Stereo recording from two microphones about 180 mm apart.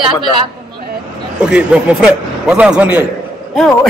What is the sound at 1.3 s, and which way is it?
A man's voice, 5° right (ahead or behind).